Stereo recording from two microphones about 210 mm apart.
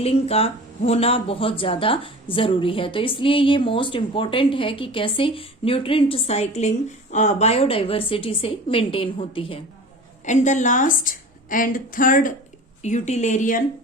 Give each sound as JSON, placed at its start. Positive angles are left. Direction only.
{"t": 0.0, "sound": "a woman's voice", "side_deg": 30}